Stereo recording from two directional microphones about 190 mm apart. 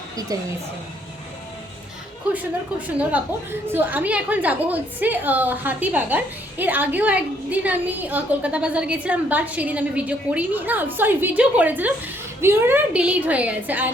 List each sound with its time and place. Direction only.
0.3 s a woman's voice: 20° right (ahead or behind)
2.3 s a woman's voice: 10° right (ahead or behind)